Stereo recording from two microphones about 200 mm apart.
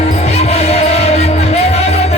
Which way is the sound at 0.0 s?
30° left (ahead or behind).